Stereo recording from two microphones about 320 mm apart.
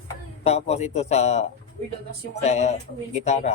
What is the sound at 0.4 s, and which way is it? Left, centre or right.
Speech, centre.